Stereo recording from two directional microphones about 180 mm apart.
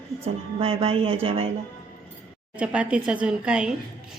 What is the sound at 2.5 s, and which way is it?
A woman's voice, 5° right (ahead or behind).